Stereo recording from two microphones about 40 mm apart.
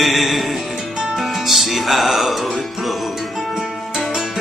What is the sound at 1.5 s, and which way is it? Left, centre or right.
Music, centre.